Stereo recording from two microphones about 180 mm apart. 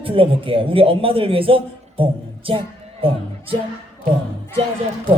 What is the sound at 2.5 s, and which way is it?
Music, 30° right (ahead or behind).